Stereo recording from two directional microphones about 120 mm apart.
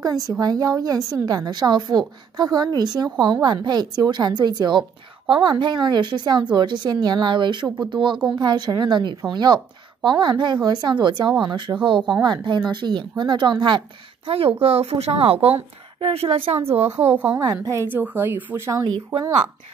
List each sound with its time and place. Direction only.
0.0 s a woman's voice: 30° right (ahead or behind); by 17.1 s 55° right (ahead or behind)
17.1 s a woman's voice: 15° right (ahead or behind)
17.4 s a woman's voice: 30° right (ahead or behind)